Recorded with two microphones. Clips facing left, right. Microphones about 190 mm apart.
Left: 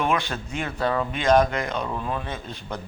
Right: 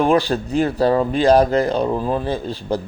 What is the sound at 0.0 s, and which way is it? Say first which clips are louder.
Speech: right 9 dB; 35° right (ahead or behind).